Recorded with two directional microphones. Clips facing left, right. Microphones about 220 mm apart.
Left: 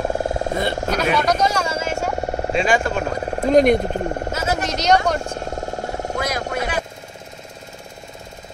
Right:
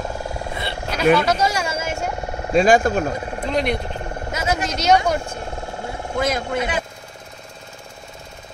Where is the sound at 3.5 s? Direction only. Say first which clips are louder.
Left 8 dB; 45° left (ahead or behind).